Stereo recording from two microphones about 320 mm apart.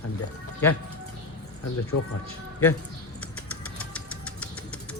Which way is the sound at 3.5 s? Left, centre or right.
Centre.